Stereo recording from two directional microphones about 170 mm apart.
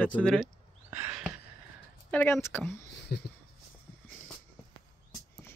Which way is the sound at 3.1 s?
65° left (ahead or behind).